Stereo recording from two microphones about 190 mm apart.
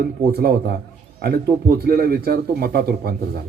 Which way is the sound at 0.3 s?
55° right (ahead or behind).